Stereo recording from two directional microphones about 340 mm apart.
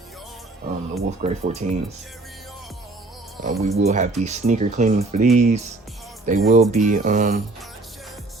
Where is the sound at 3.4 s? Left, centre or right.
Right.